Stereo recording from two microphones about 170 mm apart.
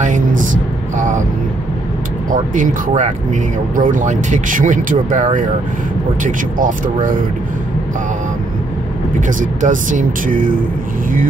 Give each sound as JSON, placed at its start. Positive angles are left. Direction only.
{"t": 0.0, "sound": "a sound", "side_deg": -50}
{"t": 0.9, "sound": "vehicle", "side_deg": -45}
{"t": 2.3, "sound": "speech", "side_deg": -50}
{"t": 9.4, "sound": "speech", "side_deg": -50}